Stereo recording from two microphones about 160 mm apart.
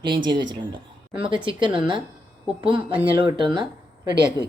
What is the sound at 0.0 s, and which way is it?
A woman's voice, 30° right (ahead or behind).